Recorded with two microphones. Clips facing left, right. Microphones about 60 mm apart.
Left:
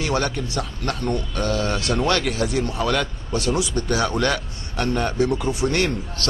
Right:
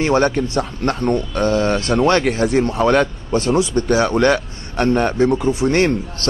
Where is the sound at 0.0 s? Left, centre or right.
Right.